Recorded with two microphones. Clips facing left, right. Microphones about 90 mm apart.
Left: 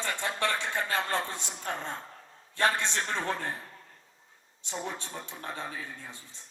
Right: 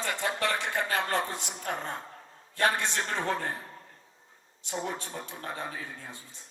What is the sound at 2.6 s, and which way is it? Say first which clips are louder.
Speech: even; 15° right (ahead or behind).